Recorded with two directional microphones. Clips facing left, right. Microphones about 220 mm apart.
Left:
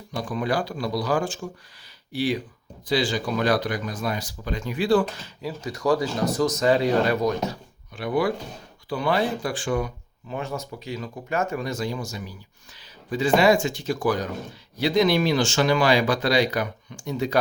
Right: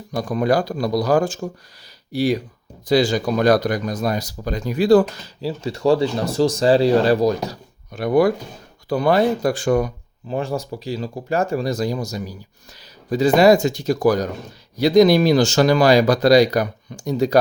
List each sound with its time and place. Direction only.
0.1 s speech: 40° right (ahead or behind)